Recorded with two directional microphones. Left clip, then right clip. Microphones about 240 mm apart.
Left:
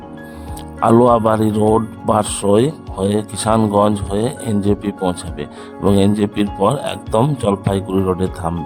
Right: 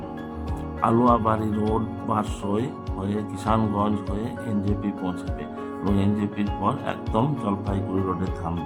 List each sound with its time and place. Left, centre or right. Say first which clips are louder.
0.8 s speech: left 9 dB; left